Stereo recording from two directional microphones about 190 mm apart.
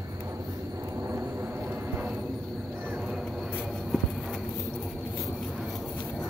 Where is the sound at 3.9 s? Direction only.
Centre (ahead or behind).